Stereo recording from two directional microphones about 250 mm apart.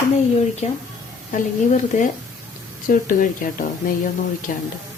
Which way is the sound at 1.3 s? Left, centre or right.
Left.